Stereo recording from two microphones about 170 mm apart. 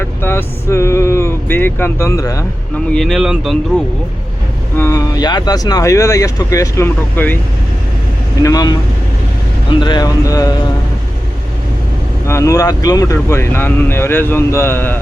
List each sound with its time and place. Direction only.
0.0 s speech: 15° left (ahead or behind)
2.9 s speech: centre (ahead or behind)
4.8 s speech: 20° left (ahead or behind)
8.4 s speech: 20° left (ahead or behind)
9.8 s speech: 25° left (ahead or behind)
12.3 s speech: 20° left (ahead or behind)